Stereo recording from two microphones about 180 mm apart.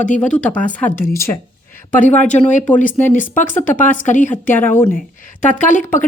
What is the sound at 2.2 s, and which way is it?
A woman's voice, 40° left (ahead or behind).